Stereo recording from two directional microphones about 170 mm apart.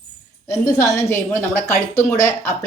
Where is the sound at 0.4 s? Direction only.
15° left (ahead or behind).